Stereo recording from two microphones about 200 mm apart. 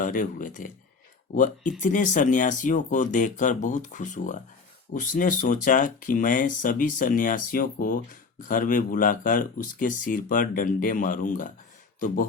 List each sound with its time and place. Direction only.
0.0 s speech: 40° left (ahead or behind)